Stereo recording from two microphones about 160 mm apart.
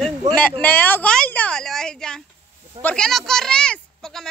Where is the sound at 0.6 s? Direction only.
10° left (ahead or behind).